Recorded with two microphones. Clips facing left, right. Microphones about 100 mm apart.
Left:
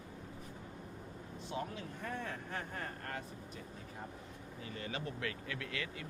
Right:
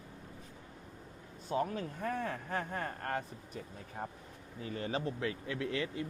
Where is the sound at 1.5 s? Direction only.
40° right (ahead or behind).